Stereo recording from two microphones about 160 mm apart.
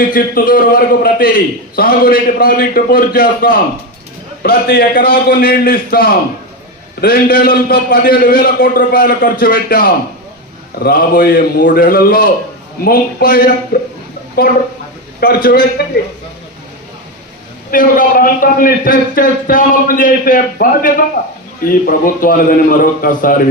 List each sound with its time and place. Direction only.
0.1 s a man's voice: 60° left (ahead or behind)
13.7 s a man's voice: 85° left
14.4 s a man's voice: 75° left (ahead or behind)
17.7 s a man's voice: 60° left (ahead or behind)